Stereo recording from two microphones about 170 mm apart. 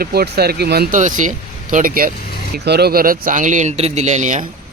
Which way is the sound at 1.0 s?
50° right (ahead or behind).